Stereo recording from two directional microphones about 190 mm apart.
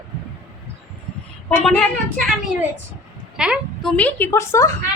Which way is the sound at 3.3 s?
5° right (ahead or behind).